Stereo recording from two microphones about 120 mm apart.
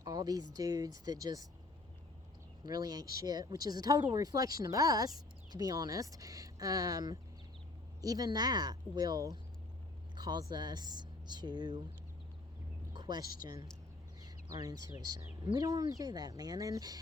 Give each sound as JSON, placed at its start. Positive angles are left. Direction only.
{"t": 0.0, "sound": "a sound", "side_deg": -30}
{"t": 0.5, "sound": "speech", "side_deg": -30}
{"t": 2.6, "sound": "speech", "side_deg": -35}
{"t": 12.9, "sound": "speech", "side_deg": -35}
{"t": 14.2, "sound": "a sound", "side_deg": -35}
{"t": 15.0, "sound": "speech", "side_deg": -30}